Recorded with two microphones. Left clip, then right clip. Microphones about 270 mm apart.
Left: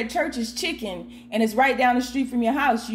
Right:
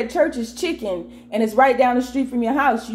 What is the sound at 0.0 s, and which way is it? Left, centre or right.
Speech, left.